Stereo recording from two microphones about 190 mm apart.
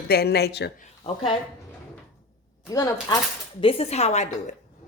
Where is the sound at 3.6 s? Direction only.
30° left (ahead or behind).